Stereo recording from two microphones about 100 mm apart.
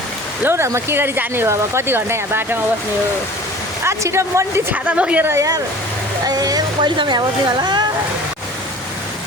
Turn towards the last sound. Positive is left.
turn(degrees=-45)  # may be behind; listen again after turning